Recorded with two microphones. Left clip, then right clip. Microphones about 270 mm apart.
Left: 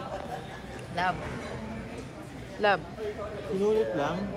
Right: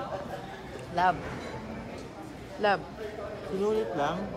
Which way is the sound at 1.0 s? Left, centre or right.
Centre.